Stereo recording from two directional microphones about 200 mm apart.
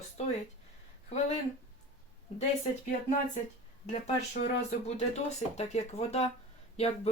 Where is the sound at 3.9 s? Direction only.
35° left (ahead or behind).